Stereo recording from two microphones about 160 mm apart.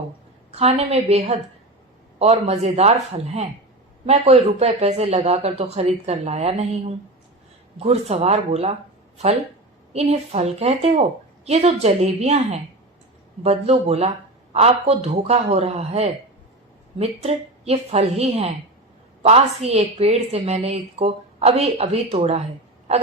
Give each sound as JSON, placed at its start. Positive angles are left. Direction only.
{"t": 0.5, "sound": "a woman's voice", "side_deg": -40}
{"t": 4.0, "sound": "a woman's voice", "side_deg": -40}
{"t": 9.9, "sound": "a woman's voice", "side_deg": -40}